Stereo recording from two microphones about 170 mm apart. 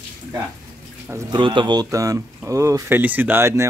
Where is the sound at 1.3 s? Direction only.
30° right (ahead or behind).